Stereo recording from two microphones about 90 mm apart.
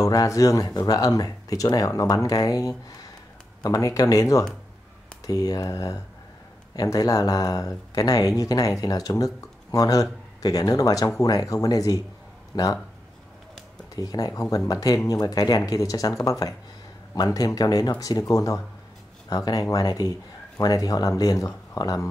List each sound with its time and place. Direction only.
0.0 s speech: 40° left (ahead or behind)
13.9 s speech: 45° left (ahead or behind)